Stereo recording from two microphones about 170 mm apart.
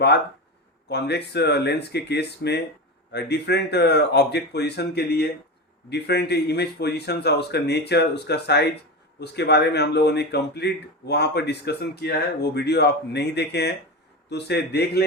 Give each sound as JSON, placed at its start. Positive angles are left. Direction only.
{"t": 0.9, "sound": "speech", "side_deg": 75}